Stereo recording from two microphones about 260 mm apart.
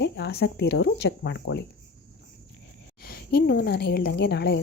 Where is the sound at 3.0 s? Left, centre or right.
Left.